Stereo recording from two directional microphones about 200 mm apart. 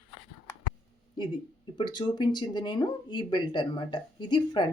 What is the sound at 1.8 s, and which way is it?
Speech, 25° left (ahead or behind).